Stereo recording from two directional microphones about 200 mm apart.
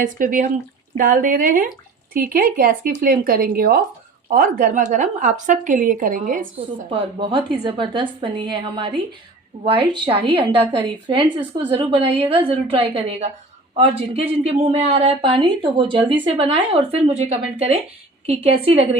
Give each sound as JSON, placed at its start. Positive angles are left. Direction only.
{"t": 0.0, "sound": "a woman's voice", "side_deg": -45}
{"t": 6.9, "sound": "speech", "side_deg": -25}